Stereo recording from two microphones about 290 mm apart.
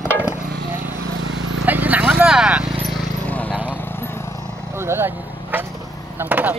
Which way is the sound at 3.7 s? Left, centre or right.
Centre.